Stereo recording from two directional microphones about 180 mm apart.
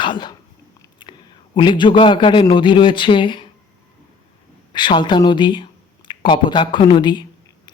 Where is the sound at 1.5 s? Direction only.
25° left (ahead or behind).